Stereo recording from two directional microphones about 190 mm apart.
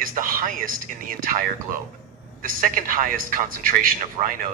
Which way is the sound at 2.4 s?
45° right (ahead or behind).